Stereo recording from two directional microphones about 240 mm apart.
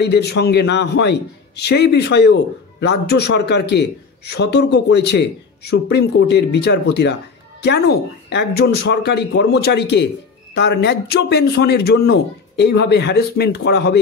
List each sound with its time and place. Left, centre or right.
0.0 s a man's voice: left